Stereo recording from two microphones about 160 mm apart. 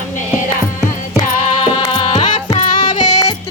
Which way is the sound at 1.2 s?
35° left (ahead or behind).